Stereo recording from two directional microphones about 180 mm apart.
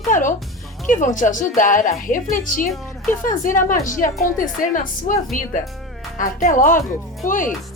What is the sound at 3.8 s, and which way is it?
A woman's voice, 45° left (ahead or behind).